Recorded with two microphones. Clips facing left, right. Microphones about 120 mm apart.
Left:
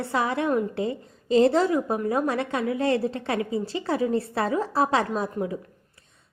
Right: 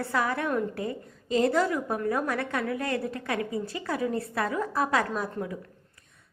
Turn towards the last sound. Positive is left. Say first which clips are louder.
# left 4 dB
turn(degrees=25)  # may be behind; listen again after turning